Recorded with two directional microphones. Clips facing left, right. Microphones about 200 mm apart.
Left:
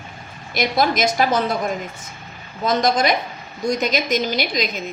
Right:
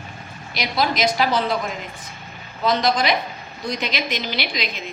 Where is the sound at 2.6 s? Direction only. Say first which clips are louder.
Left 2 dB; 45° left (ahead or behind).